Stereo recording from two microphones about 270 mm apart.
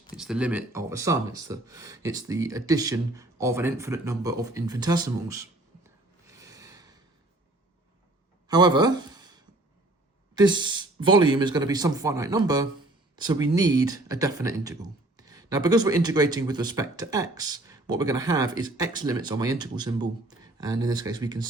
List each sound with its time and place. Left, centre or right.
0.2 s speech: centre
6.3 s gasp: centre
8.4 s speech: centre
10.3 s speech: centre